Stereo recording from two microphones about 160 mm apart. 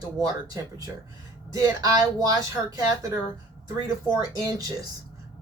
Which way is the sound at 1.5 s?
25° right (ahead or behind).